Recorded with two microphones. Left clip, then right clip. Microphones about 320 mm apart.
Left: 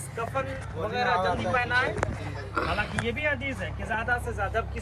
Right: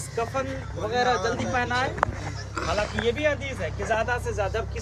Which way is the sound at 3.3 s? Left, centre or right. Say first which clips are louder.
Right 3 dB; right.